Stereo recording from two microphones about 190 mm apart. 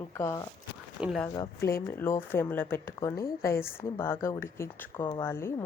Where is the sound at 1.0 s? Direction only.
5° right (ahead or behind).